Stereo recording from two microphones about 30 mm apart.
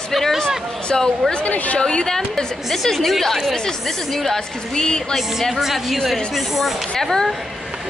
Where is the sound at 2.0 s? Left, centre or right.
Centre.